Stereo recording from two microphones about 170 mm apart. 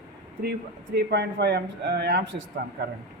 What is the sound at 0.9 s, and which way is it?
Speech, 75° right (ahead or behind).